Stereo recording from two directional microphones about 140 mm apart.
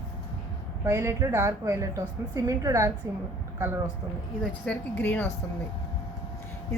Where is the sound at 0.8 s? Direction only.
20° right (ahead or behind).